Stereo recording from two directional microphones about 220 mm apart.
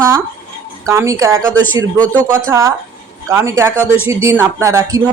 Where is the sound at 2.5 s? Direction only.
15° right (ahead or behind).